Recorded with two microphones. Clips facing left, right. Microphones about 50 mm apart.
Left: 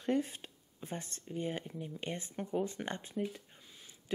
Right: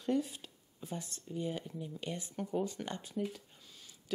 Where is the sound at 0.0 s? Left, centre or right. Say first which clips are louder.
Even; left.